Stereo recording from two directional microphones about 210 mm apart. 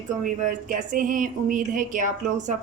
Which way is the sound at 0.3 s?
40° right (ahead or behind).